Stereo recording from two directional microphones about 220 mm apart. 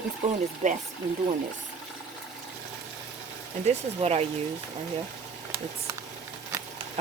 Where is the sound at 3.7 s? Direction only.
30° right (ahead or behind).